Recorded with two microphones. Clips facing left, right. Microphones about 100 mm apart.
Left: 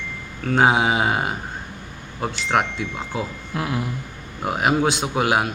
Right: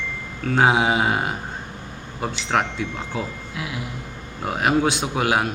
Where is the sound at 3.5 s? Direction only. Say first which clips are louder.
Left 7 dB; 45° left (ahead or behind).